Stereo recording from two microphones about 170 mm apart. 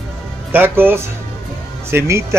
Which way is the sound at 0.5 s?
10° right (ahead or behind).